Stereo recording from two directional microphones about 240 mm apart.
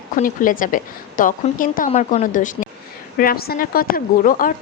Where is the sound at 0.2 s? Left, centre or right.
Left.